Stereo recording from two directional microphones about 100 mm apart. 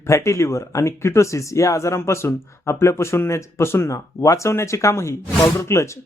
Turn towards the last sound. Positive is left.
turn(degrees=30)  # may be behind; listen again after turning